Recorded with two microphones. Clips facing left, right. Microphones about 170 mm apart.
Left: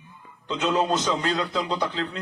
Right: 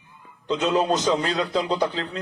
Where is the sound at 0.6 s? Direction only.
35° right (ahead or behind).